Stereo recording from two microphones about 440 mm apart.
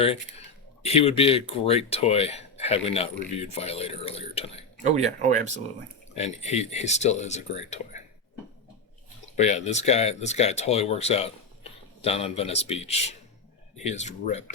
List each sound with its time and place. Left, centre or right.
0.8 s speech: centre
4.8 s speech: centre
6.1 s speech: centre
9.3 s speech: centre